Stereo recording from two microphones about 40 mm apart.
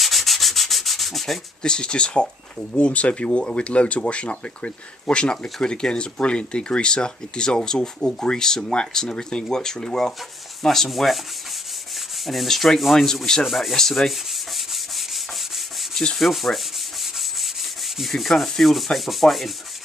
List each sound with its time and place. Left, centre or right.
0.0 s sanding: centre
1.6 s speech: left
10.6 s sanding: centre
12.3 s sanding: centre
13.7 s rub: centre
15.9 s sanding: centre
16.2 s sanding: centre
17.9 s sanding: centre